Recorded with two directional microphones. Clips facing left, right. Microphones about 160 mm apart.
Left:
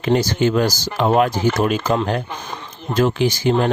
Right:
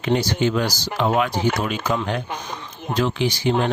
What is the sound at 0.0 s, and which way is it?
Speech, 45° left (ahead or behind).